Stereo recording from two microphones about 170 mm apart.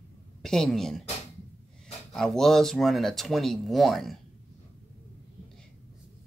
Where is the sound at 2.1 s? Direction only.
5° left (ahead or behind).